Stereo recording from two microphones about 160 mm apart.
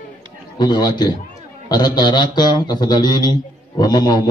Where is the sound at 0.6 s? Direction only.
25° left (ahead or behind).